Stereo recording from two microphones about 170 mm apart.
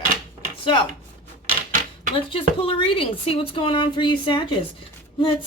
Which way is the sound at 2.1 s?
35° left (ahead or behind).